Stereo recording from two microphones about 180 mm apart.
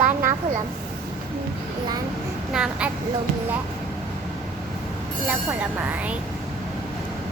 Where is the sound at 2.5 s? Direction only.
5° right (ahead or behind).